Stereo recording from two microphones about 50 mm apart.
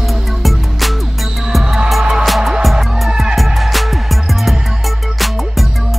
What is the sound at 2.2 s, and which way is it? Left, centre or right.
Music, centre.